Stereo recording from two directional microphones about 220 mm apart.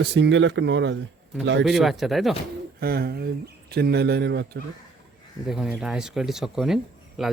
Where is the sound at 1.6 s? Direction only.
Centre (ahead or behind).